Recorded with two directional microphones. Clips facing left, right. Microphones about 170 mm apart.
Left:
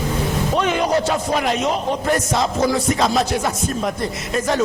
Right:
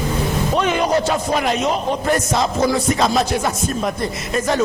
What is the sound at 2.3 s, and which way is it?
Music, 20° right (ahead or behind).